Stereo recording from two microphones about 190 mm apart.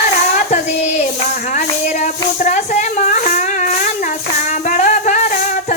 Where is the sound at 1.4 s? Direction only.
40° left (ahead or behind).